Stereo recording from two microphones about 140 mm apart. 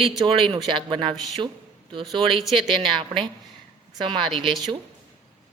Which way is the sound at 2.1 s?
40° right (ahead or behind).